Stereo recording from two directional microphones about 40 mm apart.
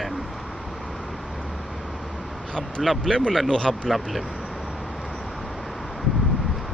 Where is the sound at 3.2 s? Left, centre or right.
Centre.